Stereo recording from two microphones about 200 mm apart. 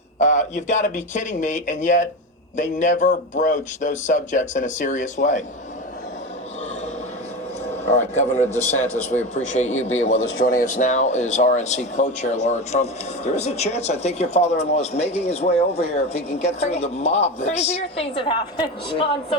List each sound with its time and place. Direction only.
0.2 s speech: 35° left (ahead or behind)
8.1 s speech: 35° left (ahead or behind)